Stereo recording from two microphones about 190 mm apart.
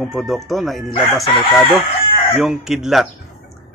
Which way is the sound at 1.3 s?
25° left (ahead or behind).